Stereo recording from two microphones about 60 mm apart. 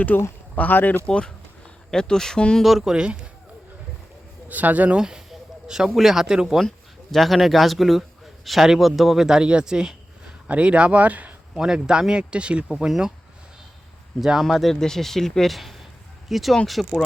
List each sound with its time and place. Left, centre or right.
0.1 s speech: left
1.0 s speech: centre
2.6 s speech: centre
2.9 s speech: centre
4.4 s speech: right
4.9 s a sound: centre
5.9 s speech: centre
6.7 s speech: centre; by 11.3 s right
11.5 s speech: centre
14.2 s speech: centre